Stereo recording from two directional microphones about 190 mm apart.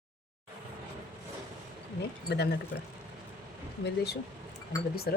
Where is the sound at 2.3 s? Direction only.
60° left (ahead or behind).